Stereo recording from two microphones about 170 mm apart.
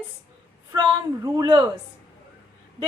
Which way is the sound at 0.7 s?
20° right (ahead or behind).